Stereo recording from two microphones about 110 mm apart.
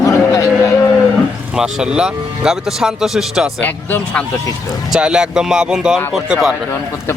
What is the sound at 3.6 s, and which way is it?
Speech, 15° left (ahead or behind).